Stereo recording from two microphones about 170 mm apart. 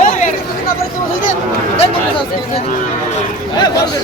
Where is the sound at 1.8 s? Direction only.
35° left (ahead or behind).